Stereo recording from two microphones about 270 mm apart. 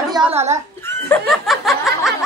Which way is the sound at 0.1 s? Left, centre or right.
Centre.